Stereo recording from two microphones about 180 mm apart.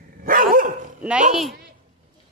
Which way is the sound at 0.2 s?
50° right (ahead or behind).